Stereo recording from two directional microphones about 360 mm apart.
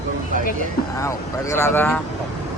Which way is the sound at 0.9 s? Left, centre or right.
Centre.